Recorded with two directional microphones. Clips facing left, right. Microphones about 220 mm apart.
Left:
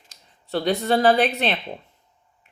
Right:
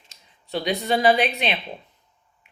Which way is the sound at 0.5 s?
10° right (ahead or behind).